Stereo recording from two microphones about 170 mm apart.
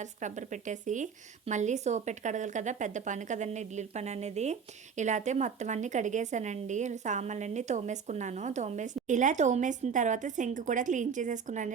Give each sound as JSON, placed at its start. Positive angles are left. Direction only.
{"t": 0.0, "sound": "a woman's voice", "side_deg": -45}